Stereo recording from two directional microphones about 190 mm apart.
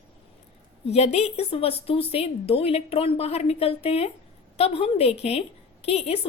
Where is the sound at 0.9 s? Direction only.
35° left (ahead or behind).